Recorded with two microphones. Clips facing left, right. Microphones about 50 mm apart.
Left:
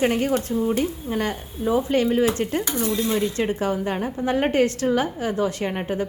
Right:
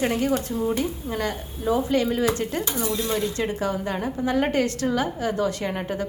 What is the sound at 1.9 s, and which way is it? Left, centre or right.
A woman's voice, left.